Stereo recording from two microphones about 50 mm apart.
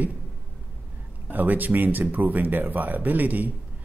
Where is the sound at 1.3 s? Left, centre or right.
Right.